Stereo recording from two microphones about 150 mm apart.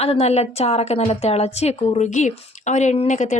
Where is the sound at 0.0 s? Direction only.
45° left (ahead or behind).